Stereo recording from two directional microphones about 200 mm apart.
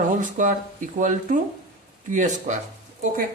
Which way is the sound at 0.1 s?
40° right (ahead or behind).